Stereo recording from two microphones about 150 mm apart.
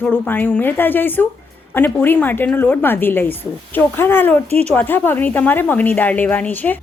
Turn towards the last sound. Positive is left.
turn(degrees=10)  # may be behind; listen again after turning